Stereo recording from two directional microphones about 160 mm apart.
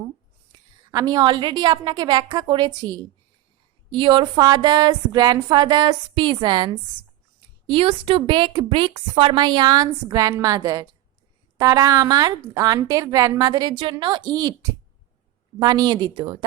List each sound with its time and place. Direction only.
0.9 s a woman's voice: 25° right (ahead or behind)
7.7 s a woman's voice: 35° right (ahead or behind)
15.5 s a woman's voice: 25° right (ahead or behind)